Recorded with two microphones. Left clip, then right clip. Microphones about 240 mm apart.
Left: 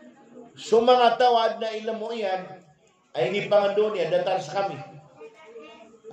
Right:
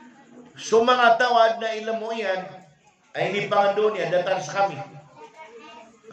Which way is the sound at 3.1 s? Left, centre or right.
Centre.